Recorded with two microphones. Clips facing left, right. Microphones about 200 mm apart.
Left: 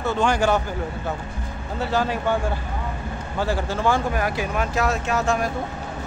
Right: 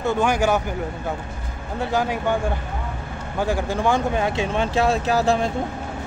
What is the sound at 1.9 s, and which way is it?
Speech, 15° right (ahead or behind).